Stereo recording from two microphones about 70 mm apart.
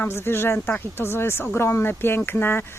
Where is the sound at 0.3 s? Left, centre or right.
Left.